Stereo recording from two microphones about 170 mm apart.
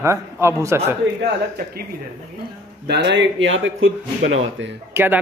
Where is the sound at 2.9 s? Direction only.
85° right.